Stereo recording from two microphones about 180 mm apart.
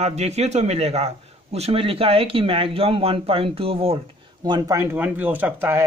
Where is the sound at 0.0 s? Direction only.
40° right (ahead or behind).